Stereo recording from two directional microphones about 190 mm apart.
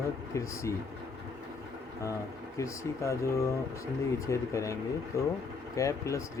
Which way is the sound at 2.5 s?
15° left (ahead or behind).